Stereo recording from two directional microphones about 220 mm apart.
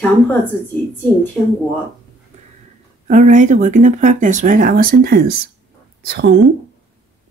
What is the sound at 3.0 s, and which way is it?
Speech, 35° right (ahead or behind).